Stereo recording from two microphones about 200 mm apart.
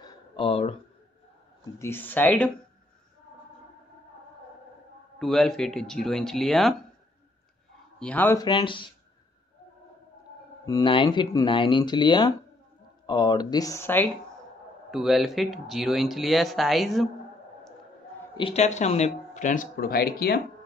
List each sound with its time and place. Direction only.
0.0 s a sound: 25° left (ahead or behind)
1.8 s speech: 10° left (ahead or behind)
5.2 s speech: centre (ahead or behind)
8.0 s speech: 10° left (ahead or behind); by 8.9 s 25° left (ahead or behind)
10.6 s speech: 20° left (ahead or behind)
14.9 s speech: centre (ahead or behind)
18.3 s speech: 30° left (ahead or behind); by 20.4 s 50° left (ahead or behind)